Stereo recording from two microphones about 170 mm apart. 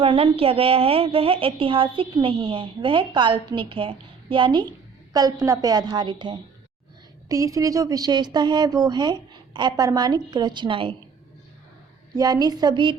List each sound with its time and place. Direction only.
0.0 s a woman's voice: 35° right (ahead or behind)
12.1 s speech: 25° right (ahead or behind)